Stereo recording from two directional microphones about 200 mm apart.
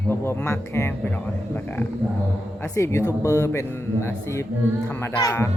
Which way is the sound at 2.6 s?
15° left (ahead or behind).